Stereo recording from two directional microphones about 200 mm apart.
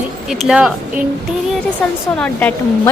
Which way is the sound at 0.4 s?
5° right (ahead or behind).